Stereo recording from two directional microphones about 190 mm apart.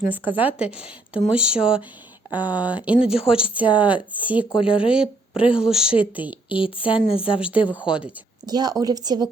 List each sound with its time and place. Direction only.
0.1 s a woman's voice: 10° right (ahead or behind)
4.4 s speech: 25° left (ahead or behind)
5.5 s a woman's voice: 5° right (ahead or behind)
6.5 s speech: 25° left (ahead or behind)
7.3 s a woman's voice: 5° right (ahead or behind)
8.4 s a woman's voice: 20° right (ahead or behind)